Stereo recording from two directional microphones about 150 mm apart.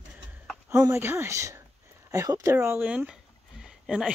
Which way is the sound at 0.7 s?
15° right (ahead or behind).